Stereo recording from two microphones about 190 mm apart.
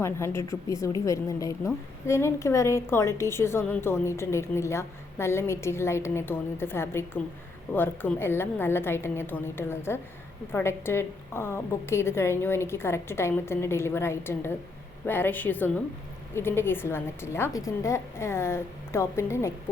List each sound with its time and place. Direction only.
0.0 s a woman's voice: 15° left (ahead or behind)